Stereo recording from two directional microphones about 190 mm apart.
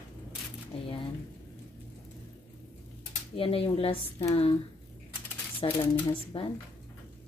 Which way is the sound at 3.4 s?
30° left (ahead or behind).